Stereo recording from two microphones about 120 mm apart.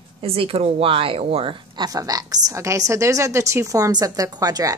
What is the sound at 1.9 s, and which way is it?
Speech, 30° right (ahead or behind).